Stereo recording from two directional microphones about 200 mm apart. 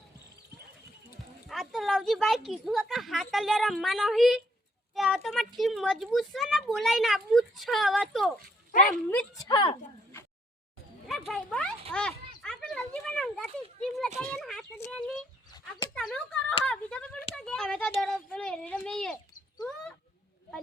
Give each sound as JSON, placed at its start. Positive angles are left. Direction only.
{"t": 1.5, "sound": "speech", "side_deg": 0}
{"t": 9.0, "sound": "speech", "side_deg": 10}
{"t": 9.5, "sound": "a woman's voice", "side_deg": 25}
{"t": 11.3, "sound": "speech", "side_deg": 5}
{"t": 11.9, "sound": "a sound", "side_deg": 5}
{"t": 14.3, "sound": "a child's voice", "side_deg": 0}